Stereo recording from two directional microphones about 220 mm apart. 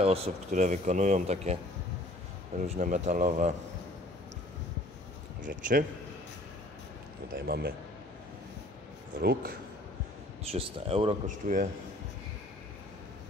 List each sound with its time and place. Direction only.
0.0 s speech: 25° right (ahead or behind)
2.6 s speech: 35° right (ahead or behind)
5.4 s speech: 40° right (ahead or behind)
7.3 s speech: 45° right (ahead or behind)
9.2 s speech: 45° right (ahead or behind)
10.5 s speech: 25° right (ahead or behind)
11.2 s speech: 35° right (ahead or behind)